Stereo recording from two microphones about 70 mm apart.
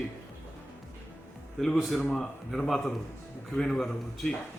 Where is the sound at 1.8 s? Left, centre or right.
Centre.